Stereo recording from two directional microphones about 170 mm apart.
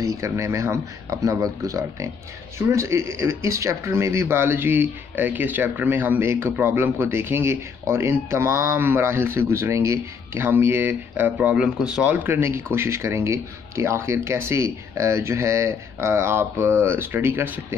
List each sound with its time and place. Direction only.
0.0 s speech: 20° right (ahead or behind)